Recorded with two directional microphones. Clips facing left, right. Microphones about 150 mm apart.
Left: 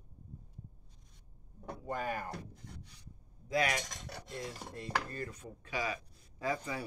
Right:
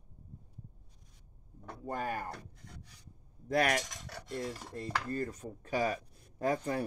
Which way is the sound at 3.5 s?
55° right (ahead or behind).